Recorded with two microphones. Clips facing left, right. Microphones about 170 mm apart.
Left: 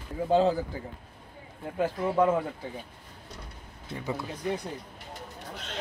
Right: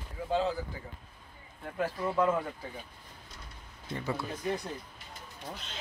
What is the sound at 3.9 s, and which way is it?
Speech, 15° left (ahead or behind).